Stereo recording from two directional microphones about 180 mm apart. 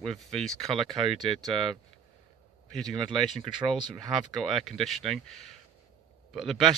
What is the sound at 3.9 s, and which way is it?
Speech, centre (ahead or behind).